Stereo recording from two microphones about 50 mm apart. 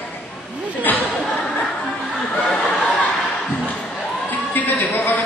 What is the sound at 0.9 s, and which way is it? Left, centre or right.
Chatter, left.